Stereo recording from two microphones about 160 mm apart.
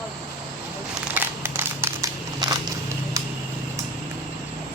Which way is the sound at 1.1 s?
15° right (ahead or behind).